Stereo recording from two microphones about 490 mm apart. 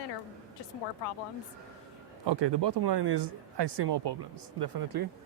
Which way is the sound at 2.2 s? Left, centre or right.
Right.